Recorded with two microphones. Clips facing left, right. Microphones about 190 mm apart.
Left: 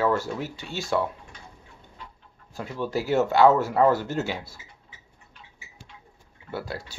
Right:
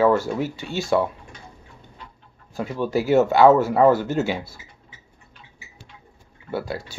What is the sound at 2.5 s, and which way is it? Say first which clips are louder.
Speech: right 5 dB; 15° right (ahead or behind).